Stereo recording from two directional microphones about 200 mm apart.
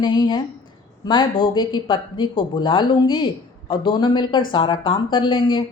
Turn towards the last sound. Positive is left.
turn(degrees=25)  # may be behind; listen again after turning